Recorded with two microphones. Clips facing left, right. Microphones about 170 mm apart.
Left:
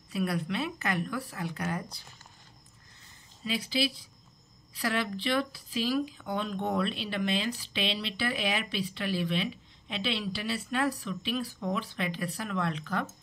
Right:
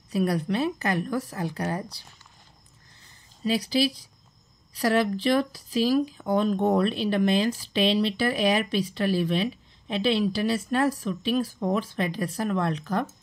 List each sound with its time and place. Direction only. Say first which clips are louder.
0.1 s speech: right 6 dB; 40° right (ahead or behind)
3.4 s speech: right 7 dB; 40° right (ahead or behind)